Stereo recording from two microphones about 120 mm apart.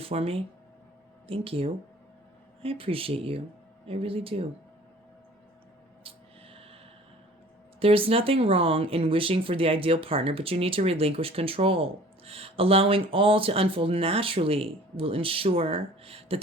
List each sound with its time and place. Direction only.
0.0 s speech: 55° right (ahead or behind)
6.0 s snort: 50° right (ahead or behind)
7.8 s speech: 50° right (ahead or behind)